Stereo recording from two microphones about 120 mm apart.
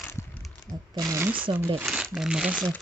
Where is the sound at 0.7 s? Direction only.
30° right (ahead or behind).